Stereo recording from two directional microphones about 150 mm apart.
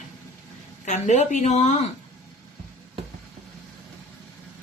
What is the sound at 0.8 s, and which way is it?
Speech, 50° left (ahead or behind).